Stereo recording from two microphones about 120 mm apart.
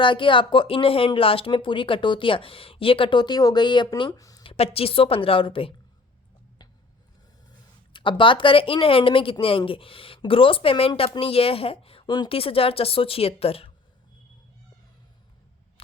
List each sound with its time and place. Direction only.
0.0 s a woman's voice: 45° left (ahead or behind)
4.1 s speech: 30° left (ahead or behind)
4.4 s a woman's voice: 55° left (ahead or behind)
7.9 s a woman's voice: 45° left (ahead or behind)